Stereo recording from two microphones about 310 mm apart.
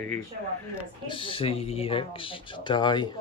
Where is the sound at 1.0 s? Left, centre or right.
Centre.